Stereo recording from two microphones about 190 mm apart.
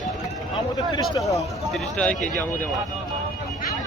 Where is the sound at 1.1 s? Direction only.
15° left (ahead or behind).